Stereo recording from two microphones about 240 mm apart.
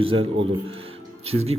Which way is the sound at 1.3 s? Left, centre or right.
Right.